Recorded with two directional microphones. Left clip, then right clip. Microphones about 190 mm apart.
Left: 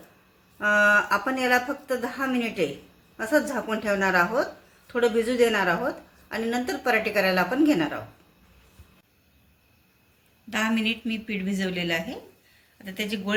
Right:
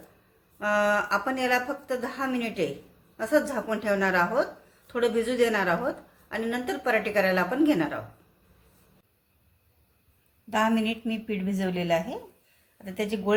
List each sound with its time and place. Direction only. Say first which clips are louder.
0.6 s a woman's voice: left 4 dB; 20° left (ahead or behind)
10.5 s a woman's voice: right 1 dB; 45° right (ahead or behind)